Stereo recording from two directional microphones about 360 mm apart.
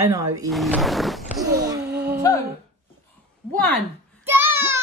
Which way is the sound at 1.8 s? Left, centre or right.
Right.